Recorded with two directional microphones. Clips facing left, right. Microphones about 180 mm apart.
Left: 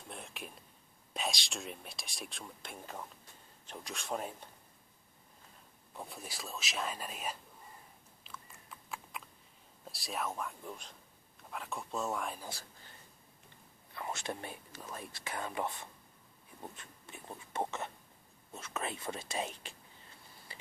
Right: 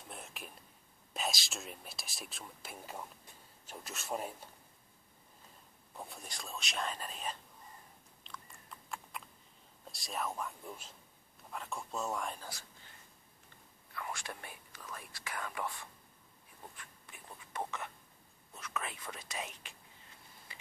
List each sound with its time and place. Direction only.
0.1 s a sound: centre (ahead or behind)
1.1 s speech: centre (ahead or behind)
5.9 s speech: centre (ahead or behind)
8.2 s typing: 5° left (ahead or behind)
9.8 s speech: centre (ahead or behind)
13.9 s speech: 25° left (ahead or behind)
16.7 s a sound: 25° left (ahead or behind)
18.5 s speech: 25° left (ahead or behind)